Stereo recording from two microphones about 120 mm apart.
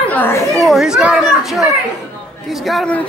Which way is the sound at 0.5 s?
Centre (ahead or behind).